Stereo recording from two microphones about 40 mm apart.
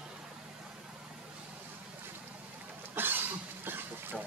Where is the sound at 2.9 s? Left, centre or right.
Right.